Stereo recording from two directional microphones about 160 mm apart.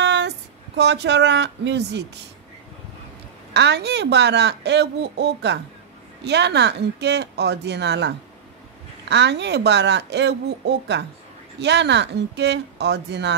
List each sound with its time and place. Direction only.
0.0 s a sound: 90° right
0.7 s speech: 90° right
3.5 s speech: 90° right
9.1 s speech: 90° right